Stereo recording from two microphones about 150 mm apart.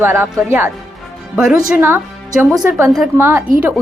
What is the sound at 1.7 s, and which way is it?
Speech, 15° right (ahead or behind).